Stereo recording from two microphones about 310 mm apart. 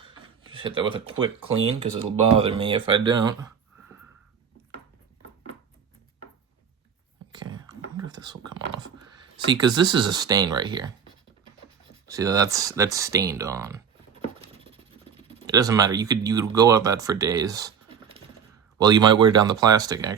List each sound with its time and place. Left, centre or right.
0.0 s a sound: centre
1.8 s speech: centre
7.3 s whispering: centre
9.5 s speech: centre
12.0 s speech: centre
15.4 s speech: centre
18.8 s speech: centre